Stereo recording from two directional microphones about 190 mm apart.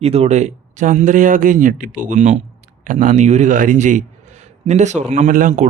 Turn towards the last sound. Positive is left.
turn(degrees=-40)  # may be behind; listen again after turning